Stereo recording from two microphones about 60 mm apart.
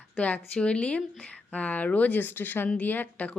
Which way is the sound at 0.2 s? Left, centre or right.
Left.